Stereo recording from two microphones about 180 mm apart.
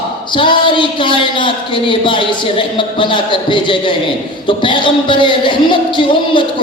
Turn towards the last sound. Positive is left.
turn(degrees=25)  # may be behind; listen again after turning